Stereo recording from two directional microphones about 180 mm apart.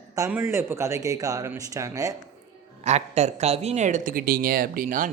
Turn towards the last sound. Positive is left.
turn(degrees=-50)  # may be behind; listen again after turning